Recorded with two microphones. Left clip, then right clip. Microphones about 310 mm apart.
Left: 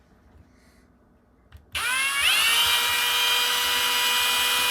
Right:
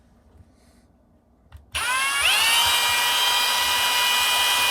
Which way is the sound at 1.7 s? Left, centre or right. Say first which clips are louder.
Right 2 dB; centre.